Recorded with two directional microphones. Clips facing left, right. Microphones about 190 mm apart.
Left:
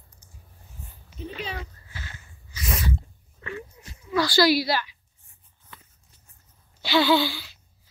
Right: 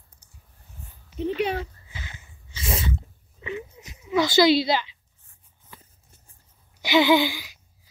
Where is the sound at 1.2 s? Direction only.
65° right (ahead or behind).